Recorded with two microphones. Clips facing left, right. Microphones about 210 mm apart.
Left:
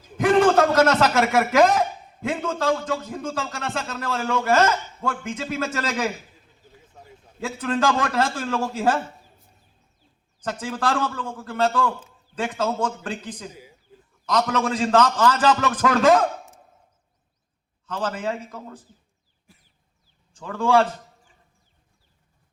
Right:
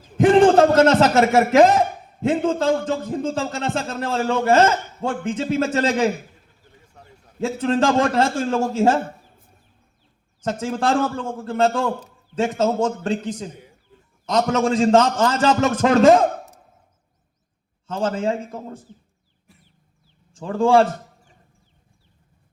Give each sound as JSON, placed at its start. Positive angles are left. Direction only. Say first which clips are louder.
{"t": 0.2, "sound": "a man's voice", "louder": "right 4 dB", "side_deg": -30}
{"t": 7.4, "sound": "a man's voice", "louder": "right 4 dB", "side_deg": -30}
{"t": 9.0, "sound": "a sound", "louder": "right 4 dB", "side_deg": -55}
{"t": 10.4, "sound": "a man's voice", "louder": "right 4 dB", "side_deg": -25}
{"t": 17.8, "sound": "a man's voice", "louder": "right 5 dB", "side_deg": -30}
{"t": 19.5, "sound": "cough", "louder": "right 2 dB", "side_deg": 0}
{"t": 20.3, "sound": "a man's voice", "louder": "right 4 dB", "side_deg": -30}
{"t": 20.8, "sound": "a sound", "louder": "right 5 dB", "side_deg": -50}